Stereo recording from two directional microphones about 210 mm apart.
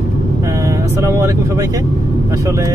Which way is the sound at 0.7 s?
15° right (ahead or behind).